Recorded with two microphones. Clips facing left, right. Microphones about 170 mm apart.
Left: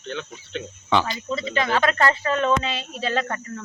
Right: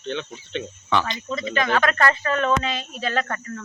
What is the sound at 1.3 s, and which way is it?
Speech, 30° left (ahead or behind).